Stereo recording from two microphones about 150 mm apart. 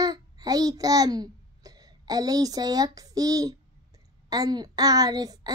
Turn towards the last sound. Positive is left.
turn(degrees=-25)  # may be behind; listen again after turning